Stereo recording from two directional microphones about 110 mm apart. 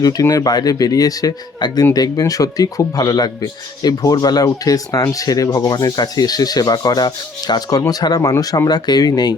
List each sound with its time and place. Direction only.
0.0 s speech: 35° left (ahead or behind)